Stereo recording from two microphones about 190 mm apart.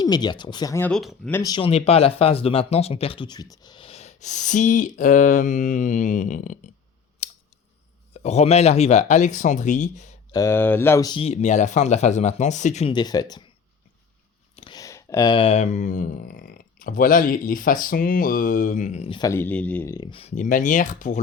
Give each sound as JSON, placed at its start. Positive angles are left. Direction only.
{"t": 0.0, "sound": "speech", "side_deg": 20}
{"t": 0.9, "sound": "speech", "side_deg": 5}
{"t": 1.4, "sound": "speech", "side_deg": 20}
{"t": 7.2, "sound": "scissors", "side_deg": 35}
{"t": 8.1, "sound": "speech", "side_deg": 35}
{"t": 10.3, "sound": "speech", "side_deg": 15}
{"t": 11.2, "sound": "speech", "side_deg": 35}
{"t": 12.9, "sound": "speech", "side_deg": 20}
{"t": 14.5, "sound": "speech", "side_deg": 25}
{"t": 19.3, "sound": "speech", "side_deg": 10}
{"t": 20.1, "sound": "speech", "side_deg": 30}